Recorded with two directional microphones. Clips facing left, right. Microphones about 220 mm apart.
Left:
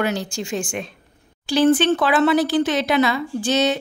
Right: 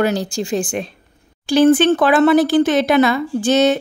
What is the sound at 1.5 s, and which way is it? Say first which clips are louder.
A woman's voice: right 4 dB; 50° right (ahead or behind).